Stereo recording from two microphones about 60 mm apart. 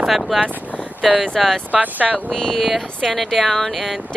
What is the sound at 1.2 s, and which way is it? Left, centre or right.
Speech, centre.